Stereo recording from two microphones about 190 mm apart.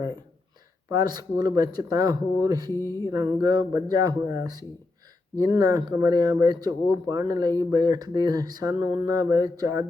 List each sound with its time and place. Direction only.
0.9 s speech: 20° right (ahead or behind)
2.7 s music: 15° left (ahead or behind)
3.4 s speech: 20° right (ahead or behind)